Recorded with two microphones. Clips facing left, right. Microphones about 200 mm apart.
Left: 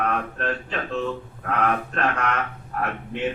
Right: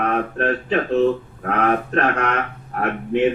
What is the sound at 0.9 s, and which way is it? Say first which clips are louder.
Speech: right 10 dB; 45° right (ahead or behind).